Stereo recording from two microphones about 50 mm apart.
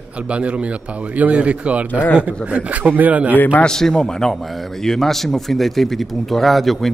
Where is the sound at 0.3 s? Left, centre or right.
Right.